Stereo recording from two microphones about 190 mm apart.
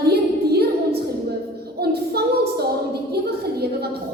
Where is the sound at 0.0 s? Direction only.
55° right (ahead or behind).